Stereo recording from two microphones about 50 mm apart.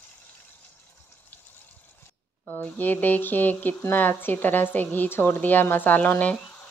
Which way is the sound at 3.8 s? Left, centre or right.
Left.